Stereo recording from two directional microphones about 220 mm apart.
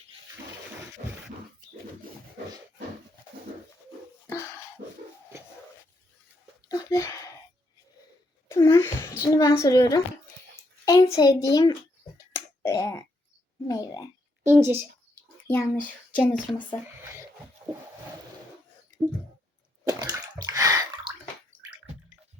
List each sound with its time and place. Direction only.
6.7 s a sound: 15° left (ahead or behind)
8.4 s a sound: 15° left (ahead or behind)
10.8 s a child's voice: 15° left (ahead or behind)
11.5 s finger snapping: 15° left (ahead or behind)
13.7 s a child's voice: 15° left (ahead or behind)
14.4 s a woman's voice: 10° right (ahead or behind)
15.4 s child singing: 5° left (ahead or behind)
16.2 s speech: centre (ahead or behind)
19.9 s bathtub: 15° right (ahead or behind)